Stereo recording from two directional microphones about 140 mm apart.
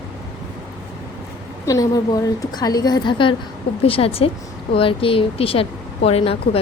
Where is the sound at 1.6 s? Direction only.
25° left (ahead or behind).